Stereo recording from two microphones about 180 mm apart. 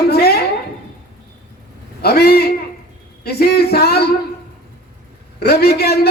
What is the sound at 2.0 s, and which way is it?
A man's voice, 60° left (ahead or behind).